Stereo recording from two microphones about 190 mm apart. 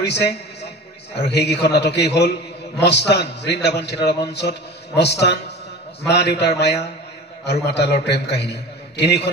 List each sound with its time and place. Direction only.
0.0 s a man's voice: 60° left (ahead or behind)